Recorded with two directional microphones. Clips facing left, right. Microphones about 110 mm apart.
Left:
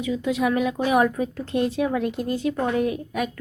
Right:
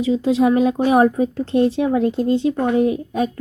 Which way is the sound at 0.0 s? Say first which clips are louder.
Right 7 dB; 30° right (ahead or behind).